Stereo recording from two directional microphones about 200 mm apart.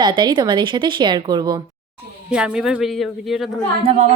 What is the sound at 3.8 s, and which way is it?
Speech, 30° right (ahead or behind).